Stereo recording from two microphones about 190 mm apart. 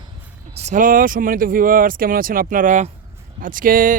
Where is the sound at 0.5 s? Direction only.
40° right (ahead or behind).